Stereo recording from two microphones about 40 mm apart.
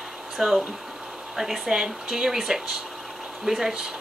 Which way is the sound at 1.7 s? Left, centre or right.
Centre.